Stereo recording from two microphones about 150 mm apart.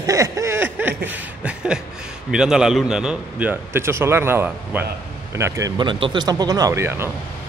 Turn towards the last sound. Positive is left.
turn(degrees=-15)  # may be behind; listen again after turning